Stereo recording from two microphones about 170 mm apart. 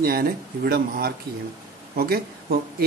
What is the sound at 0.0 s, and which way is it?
A man's voice, 60° right (ahead or behind).